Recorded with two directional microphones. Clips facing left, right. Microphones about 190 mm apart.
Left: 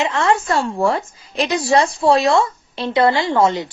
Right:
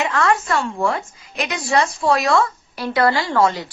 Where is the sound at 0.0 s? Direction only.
25° left (ahead or behind).